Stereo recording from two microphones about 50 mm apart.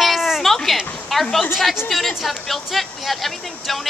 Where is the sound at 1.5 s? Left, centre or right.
Centre.